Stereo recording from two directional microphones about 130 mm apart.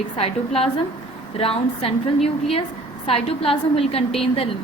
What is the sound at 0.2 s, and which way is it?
Speech, 50° left (ahead or behind).